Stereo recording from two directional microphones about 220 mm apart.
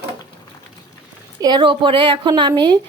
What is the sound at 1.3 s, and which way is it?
A woman's voice, 20° right (ahead or behind).